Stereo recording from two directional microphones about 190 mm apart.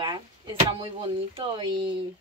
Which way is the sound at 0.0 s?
25° right (ahead or behind).